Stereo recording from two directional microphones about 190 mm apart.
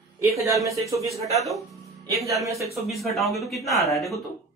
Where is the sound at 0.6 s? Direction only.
15° right (ahead or behind).